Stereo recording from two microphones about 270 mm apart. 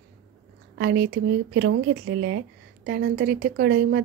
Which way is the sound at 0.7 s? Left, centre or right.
Right.